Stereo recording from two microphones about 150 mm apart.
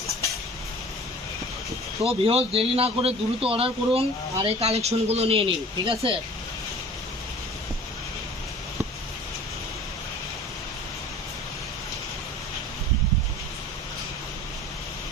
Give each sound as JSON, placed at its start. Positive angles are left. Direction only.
{"t": 2.0, "sound": "speech", "side_deg": -40}